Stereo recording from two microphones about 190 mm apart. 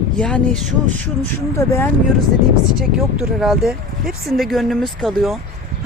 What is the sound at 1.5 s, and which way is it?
Speech, 15° left (ahead or behind).